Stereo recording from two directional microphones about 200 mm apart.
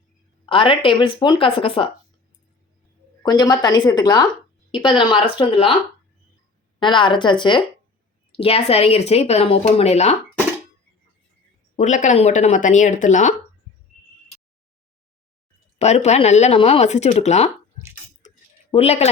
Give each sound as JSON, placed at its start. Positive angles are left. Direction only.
{"t": 0.4, "sound": "speech", "side_deg": 25}
{"t": 3.2, "sound": "speech", "side_deg": 20}
{"t": 6.7, "sound": "speech", "side_deg": 25}
{"t": 11.8, "sound": "speech", "side_deg": 35}
{"t": 15.8, "sound": "speech", "side_deg": 35}
{"t": 18.2, "sound": "a sound", "side_deg": 35}
{"t": 18.7, "sound": "speech", "side_deg": 30}